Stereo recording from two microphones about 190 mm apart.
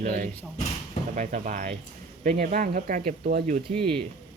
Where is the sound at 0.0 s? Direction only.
45° right (ahead or behind).